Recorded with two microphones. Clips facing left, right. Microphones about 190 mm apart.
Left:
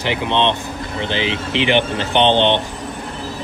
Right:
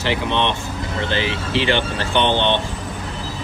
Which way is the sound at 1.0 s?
20° left (ahead or behind).